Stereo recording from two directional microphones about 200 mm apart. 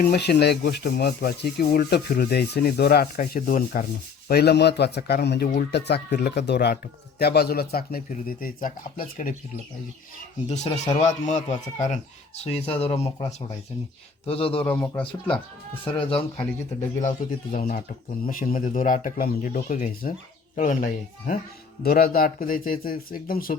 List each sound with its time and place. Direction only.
0.0 s speech: 50° left (ahead or behind)
0.6 s rub: 50° left (ahead or behind)
4.3 s speech: 55° left (ahead or behind)
7.2 s rub: 50° left (ahead or behind)
11.0 s speech: 35° left (ahead or behind)
14.3 s speech: 30° left (ahead or behind)
14.6 s speech: 5° left (ahead or behind)
16.0 s speech: 25° left (ahead or behind)
17.0 s speech: 40° left (ahead or behind)
21.8 s rub: 50° left (ahead or behind)